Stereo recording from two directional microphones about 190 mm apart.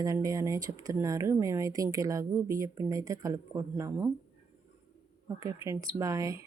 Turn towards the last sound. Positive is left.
turn(degrees=-15)  # may be behind; listen again after turning